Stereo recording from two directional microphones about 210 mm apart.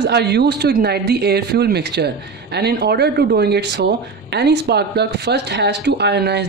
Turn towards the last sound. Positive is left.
turn(degrees=-50)  # may be behind; listen again after turning